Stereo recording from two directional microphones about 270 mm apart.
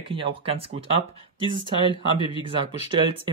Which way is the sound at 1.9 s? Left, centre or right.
Centre.